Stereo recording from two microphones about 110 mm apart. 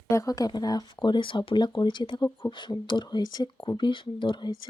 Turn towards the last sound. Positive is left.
turn(degrees=45)  # may be behind; listen again after turning